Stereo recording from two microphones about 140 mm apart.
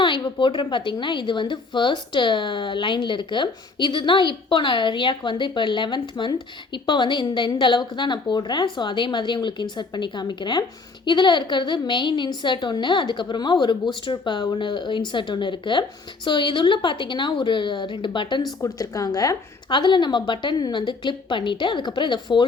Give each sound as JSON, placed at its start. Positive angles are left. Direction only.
{"t": 0.0, "sound": "a woman's voice", "side_deg": 35}